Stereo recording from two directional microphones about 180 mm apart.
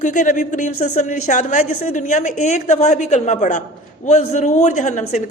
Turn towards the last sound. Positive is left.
turn(degrees=40)  # may be behind; listen again after turning